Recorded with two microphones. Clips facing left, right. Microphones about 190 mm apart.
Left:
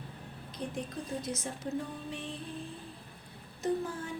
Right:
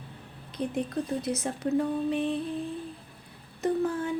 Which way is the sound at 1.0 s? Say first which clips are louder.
Right 9 dB; 65° right (ahead or behind).